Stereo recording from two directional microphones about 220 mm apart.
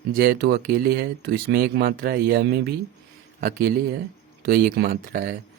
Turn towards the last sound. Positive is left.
turn(degrees=-40)  # may be behind; listen again after turning